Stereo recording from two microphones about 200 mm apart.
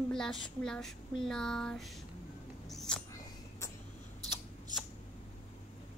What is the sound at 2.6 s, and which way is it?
Mouse, centre (ahead or behind).